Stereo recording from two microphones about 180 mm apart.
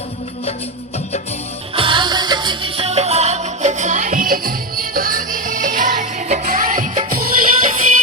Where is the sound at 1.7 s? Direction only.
30° right (ahead or behind); by 7.3 s 50° right (ahead or behind).